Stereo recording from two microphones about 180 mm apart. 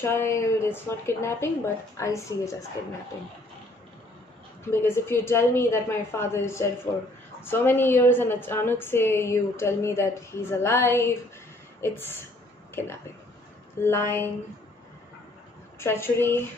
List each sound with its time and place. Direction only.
0.0 s a woman's voice: 15° left (ahead or behind)
4.6 s a woman's voice: 15° left (ahead or behind)
15.8 s a woman's voice: 15° left (ahead or behind)